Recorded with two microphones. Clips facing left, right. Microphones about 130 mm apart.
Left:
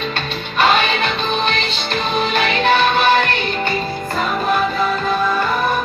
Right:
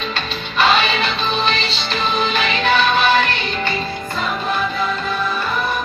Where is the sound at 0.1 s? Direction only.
50° left (ahead or behind).